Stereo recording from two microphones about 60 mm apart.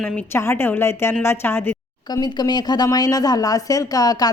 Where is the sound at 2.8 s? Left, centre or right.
Left.